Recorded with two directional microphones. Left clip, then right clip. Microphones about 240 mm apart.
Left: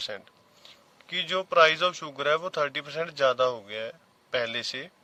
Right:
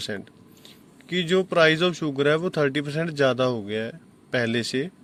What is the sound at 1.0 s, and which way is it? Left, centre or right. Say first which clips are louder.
Speech: right 5 dB; centre.